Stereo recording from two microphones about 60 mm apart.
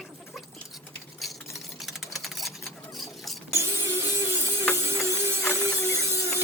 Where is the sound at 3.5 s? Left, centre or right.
Right.